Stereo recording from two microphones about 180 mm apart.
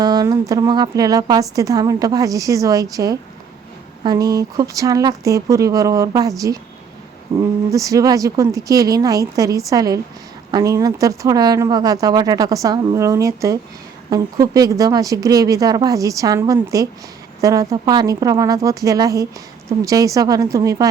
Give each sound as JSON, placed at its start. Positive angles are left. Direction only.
{"t": 0.0, "sound": "a woman's voice", "side_deg": -20}